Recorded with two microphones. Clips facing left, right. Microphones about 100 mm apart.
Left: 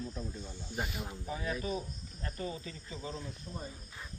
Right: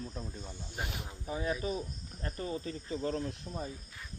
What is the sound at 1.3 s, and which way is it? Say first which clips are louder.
Cricket: right 3 dB; 30° right (ahead or behind).